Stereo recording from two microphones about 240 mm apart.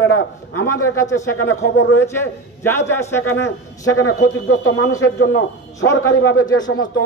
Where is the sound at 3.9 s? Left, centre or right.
Left.